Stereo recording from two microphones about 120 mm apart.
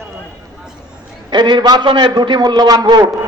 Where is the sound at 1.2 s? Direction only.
40° right (ahead or behind).